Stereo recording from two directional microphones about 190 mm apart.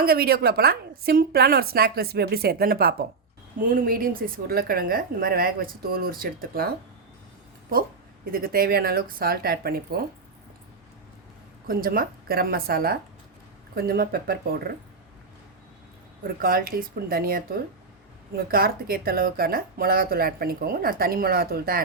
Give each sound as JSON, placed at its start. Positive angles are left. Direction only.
{"t": 0.0, "sound": "speech", "side_deg": -55}
{"t": 11.7, "sound": "speech", "side_deg": -50}
{"t": 16.2, "sound": "speech", "side_deg": -50}